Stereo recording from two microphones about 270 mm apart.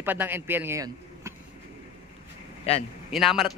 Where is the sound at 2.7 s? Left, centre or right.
Left.